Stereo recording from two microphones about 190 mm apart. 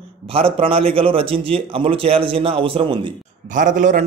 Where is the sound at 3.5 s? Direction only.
40° right (ahead or behind).